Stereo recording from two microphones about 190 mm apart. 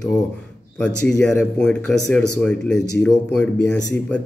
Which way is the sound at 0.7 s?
5° left (ahead or behind).